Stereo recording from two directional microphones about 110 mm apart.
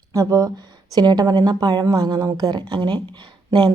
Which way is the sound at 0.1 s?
30° right (ahead or behind).